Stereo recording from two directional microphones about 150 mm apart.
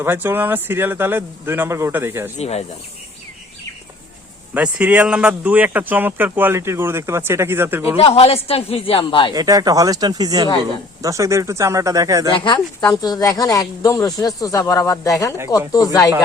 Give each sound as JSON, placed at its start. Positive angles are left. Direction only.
{"t": 0.0, "sound": "speech", "side_deg": -15}
{"t": 2.4, "sound": "speech", "side_deg": 45}
{"t": 4.5, "sound": "speech", "side_deg": -10}
{"t": 7.9, "sound": "speech", "side_deg": 45}
{"t": 9.3, "sound": "speech", "side_deg": -25}
{"t": 12.8, "sound": "speech", "side_deg": 25}